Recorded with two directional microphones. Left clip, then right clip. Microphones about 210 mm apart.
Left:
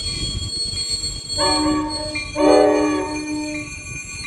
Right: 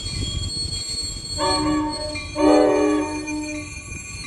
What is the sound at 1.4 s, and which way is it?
Train, 40° left (ahead or behind).